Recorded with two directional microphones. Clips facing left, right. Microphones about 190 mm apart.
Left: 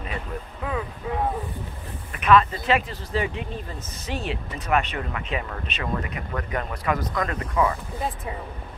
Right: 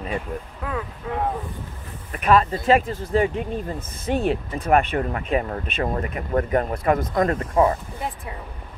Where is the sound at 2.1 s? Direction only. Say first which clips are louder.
Even; 40° right (ahead or behind).